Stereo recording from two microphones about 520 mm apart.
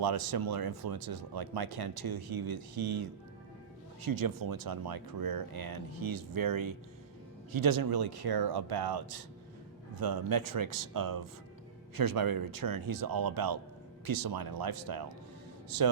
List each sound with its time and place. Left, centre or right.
0.0 s speech: right